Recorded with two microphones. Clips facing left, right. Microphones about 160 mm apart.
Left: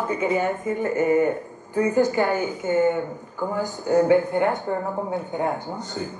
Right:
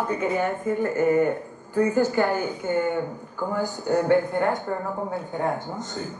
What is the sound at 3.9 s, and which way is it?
Speech, 5° left (ahead or behind).